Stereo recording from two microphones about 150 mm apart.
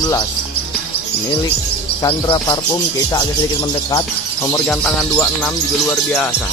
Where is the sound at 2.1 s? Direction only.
30° left (ahead or behind).